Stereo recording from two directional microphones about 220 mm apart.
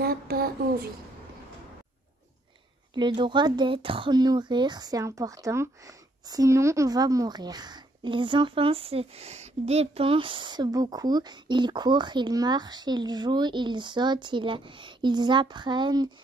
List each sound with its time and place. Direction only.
0.0 s speech: 45° right (ahead or behind)
2.9 s speech: 20° right (ahead or behind)